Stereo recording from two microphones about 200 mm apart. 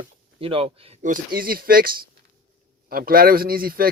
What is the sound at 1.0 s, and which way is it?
Speech, 45° right (ahead or behind).